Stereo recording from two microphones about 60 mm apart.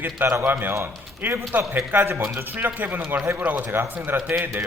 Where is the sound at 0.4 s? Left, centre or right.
Right.